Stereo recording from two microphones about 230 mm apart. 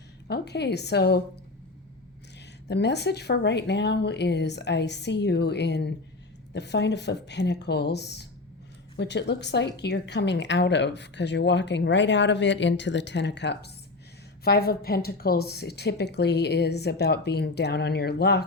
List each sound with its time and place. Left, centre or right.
0.3 s a woman's voice: left
2.6 s a woman's voice: left